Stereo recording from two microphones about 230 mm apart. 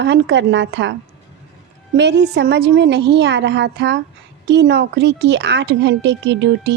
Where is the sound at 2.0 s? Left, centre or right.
Right.